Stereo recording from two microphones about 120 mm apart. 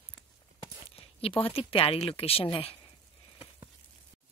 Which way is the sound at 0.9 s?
50° left (ahead or behind).